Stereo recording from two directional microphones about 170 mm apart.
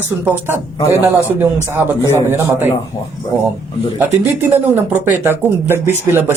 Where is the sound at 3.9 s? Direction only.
10° right (ahead or behind).